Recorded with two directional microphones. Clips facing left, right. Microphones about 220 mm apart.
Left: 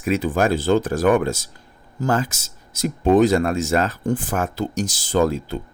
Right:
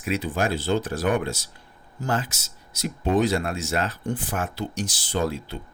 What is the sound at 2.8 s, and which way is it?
Speech, 45° left (ahead or behind).